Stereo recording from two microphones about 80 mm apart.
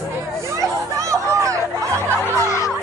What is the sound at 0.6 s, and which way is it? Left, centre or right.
Chatter, right.